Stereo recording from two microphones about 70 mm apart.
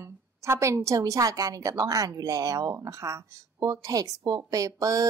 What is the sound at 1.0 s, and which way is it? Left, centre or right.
Speech, right.